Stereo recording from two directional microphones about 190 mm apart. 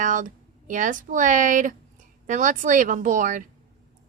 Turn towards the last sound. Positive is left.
turn(degrees=-45)  # may be behind; listen again after turning